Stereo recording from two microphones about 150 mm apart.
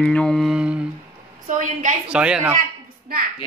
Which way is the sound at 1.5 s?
60° right (ahead or behind).